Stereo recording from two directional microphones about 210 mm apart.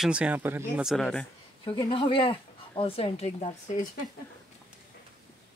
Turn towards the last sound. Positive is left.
turn(degrees=35)  # may be behind; listen again after turning